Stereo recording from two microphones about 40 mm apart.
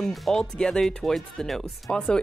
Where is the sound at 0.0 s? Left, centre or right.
Centre.